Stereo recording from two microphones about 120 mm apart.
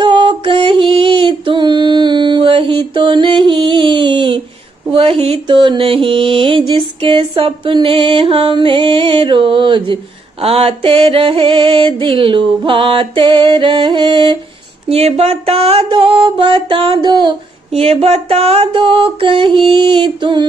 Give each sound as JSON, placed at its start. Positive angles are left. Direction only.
{"t": 0.0, "sound": "a sound", "side_deg": -40}
{"t": 4.9, "sound": "mantra", "side_deg": -50}
{"t": 10.4, "sound": "mantra", "side_deg": -55}
{"t": 14.9, "sound": "mantra", "side_deg": -55}
{"t": 17.7, "sound": "mantra", "side_deg": -55}